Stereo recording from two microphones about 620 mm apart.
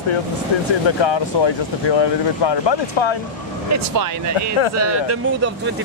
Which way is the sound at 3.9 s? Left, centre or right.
Right.